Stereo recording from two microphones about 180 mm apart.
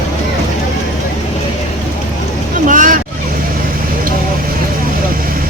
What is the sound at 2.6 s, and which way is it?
Vehicle, 45° right (ahead or behind).